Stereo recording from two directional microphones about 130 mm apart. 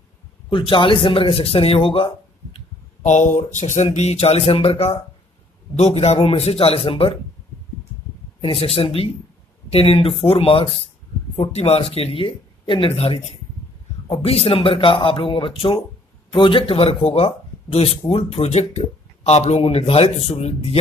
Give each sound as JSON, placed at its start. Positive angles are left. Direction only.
{"t": 0.5, "sound": "speech", "side_deg": 40}
{"t": 3.0, "sound": "speech", "side_deg": 65}
{"t": 8.4, "sound": "speech", "side_deg": 50}